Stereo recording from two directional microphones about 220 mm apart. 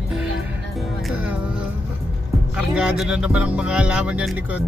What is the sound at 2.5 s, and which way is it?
Speech, 5° right (ahead or behind).